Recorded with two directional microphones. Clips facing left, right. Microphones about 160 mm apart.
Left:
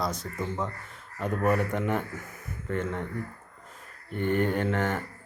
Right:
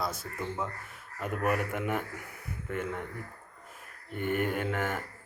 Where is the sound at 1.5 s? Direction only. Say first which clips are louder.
Left 4 dB; 10° right (ahead or behind).